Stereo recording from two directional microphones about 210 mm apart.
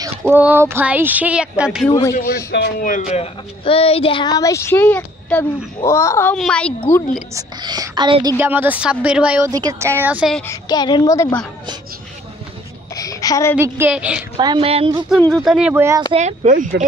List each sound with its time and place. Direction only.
0.3 s a woman's voice: 10° right (ahead or behind)
2.5 s speech: 45° left (ahead or behind)
3.1 s a woman's voice: 30° left (ahead or behind); by 6.7 s 5° left (ahead or behind)
7.3 s a woman's voice: 15° right (ahead or behind)
9.5 s a woman's voice: 15° right (ahead or behind)
10.4 s a woman's voice: 15° left (ahead or behind)
12.9 s a sound: 15° left (ahead or behind)
13.6 s a woman's voice: 10° right (ahead or behind)
14.4 s speech: 25° right (ahead or behind)
15.0 s speech: 5° left (ahead or behind)
16.1 s speech: 30° right (ahead or behind)